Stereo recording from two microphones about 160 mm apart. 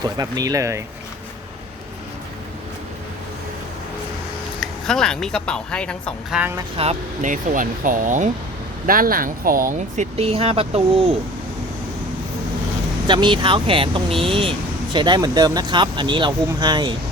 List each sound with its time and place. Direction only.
0.0 s speech: 25° right (ahead or behind)
4.6 s speech: 5° left (ahead or behind)
6.3 s speech: 5° right (ahead or behind)
6.7 s speech: 45° right (ahead or behind)
13.1 s speech: 30° right (ahead or behind)